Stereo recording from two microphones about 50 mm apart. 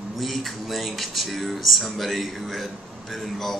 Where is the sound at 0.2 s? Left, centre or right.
Centre.